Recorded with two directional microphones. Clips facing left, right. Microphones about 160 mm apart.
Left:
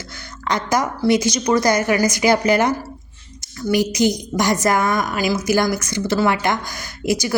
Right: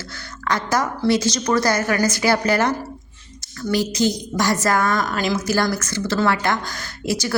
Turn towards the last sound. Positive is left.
turn(degrees=15)  # may be behind; listen again after turning